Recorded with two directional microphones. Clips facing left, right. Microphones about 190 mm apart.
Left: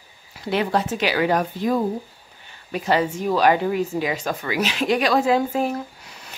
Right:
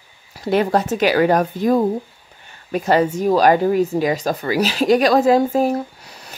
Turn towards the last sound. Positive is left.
turn(degrees=-40)  # may be behind; listen again after turning